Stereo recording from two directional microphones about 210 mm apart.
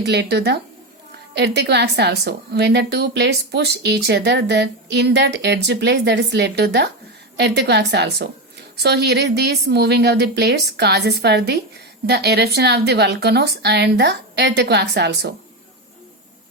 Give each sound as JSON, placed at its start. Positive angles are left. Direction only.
{"t": 0.0, "sound": "a woman's voice", "side_deg": -55}